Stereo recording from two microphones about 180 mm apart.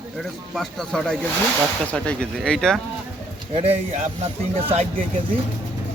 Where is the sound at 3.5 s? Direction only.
35° right (ahead or behind).